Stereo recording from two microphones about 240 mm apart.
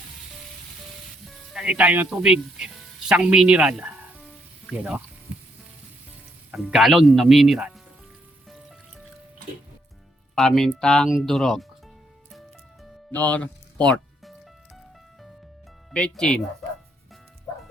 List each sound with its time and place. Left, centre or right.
1.5 s a man's voice: centre
3.1 s music: centre
6.5 s a man's voice: centre
10.3 s a man's voice: centre
12.3 s music: centre
15.9 s a man's voice: centre